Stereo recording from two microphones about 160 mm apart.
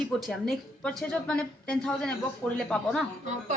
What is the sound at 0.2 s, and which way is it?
A woman's voice, centre (ahead or behind).